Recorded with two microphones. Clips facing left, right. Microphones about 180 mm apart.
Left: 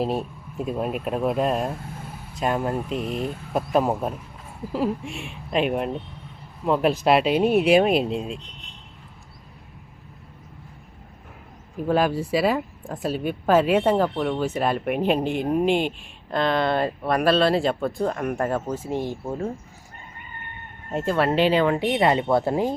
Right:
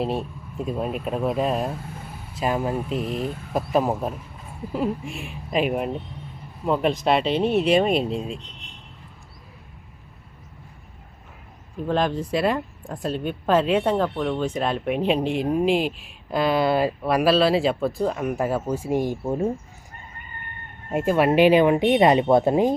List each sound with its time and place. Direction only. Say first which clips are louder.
0.0 s speech: left 1 dB; centre (ahead or behind)
11.9 s speech: left 2 dB; 5° left (ahead or behind); by 19.5 s 15° right (ahead or behind)
20.9 s speech: right 3 dB; 15° right (ahead or behind)